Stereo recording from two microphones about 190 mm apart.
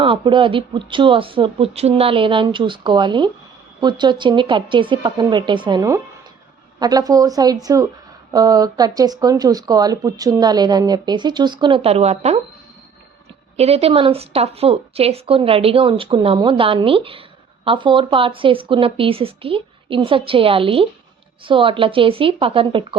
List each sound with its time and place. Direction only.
0.0 s speech: 25° right (ahead or behind)
13.6 s speech: 30° right (ahead or behind)